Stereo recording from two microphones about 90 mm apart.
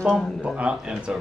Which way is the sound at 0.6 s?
10° right (ahead or behind).